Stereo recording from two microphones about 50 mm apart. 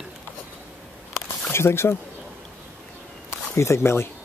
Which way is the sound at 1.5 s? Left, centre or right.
Left.